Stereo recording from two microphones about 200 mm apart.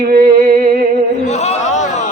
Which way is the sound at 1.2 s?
35° left (ahead or behind).